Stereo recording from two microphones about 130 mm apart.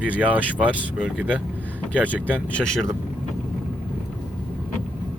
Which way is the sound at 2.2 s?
10° left (ahead or behind).